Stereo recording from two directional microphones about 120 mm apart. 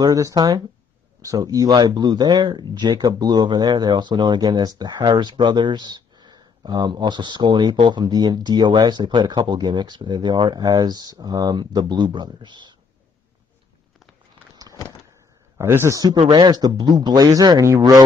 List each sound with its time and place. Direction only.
0.0 s speech: 35° right (ahead or behind)
15.5 s a man's voice: 20° right (ahead or behind)
16.3 s speech: 35° right (ahead or behind)